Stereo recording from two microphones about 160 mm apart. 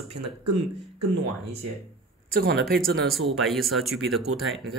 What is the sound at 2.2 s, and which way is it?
Speech, 70° right (ahead or behind).